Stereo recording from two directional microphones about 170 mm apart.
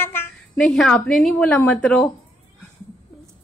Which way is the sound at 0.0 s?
15° left (ahead or behind).